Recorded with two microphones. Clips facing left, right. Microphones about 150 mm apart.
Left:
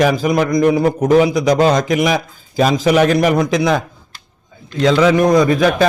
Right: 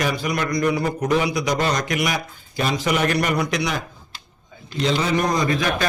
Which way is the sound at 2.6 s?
90° left.